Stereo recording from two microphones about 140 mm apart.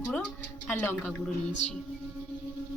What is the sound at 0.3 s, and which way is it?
Speech, 15° left (ahead or behind).